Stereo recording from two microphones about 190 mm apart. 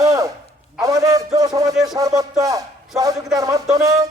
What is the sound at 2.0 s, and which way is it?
A man's voice, 20° right (ahead or behind).